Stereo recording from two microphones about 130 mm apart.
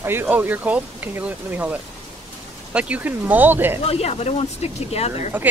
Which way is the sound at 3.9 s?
55° left (ahead or behind).